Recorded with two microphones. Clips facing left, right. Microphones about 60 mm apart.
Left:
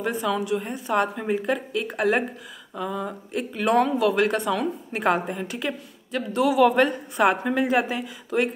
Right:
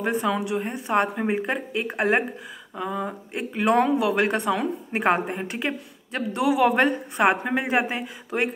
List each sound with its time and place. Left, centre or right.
0.0 s speech: right